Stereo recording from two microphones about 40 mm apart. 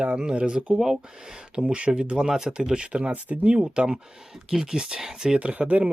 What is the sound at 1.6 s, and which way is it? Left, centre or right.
Speech, right.